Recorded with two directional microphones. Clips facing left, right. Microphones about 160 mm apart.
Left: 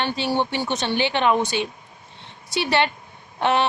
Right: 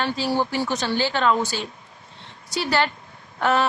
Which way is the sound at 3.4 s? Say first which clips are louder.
Even; 25° left (ahead or behind).